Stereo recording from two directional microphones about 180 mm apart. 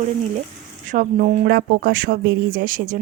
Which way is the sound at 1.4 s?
55° right (ahead or behind).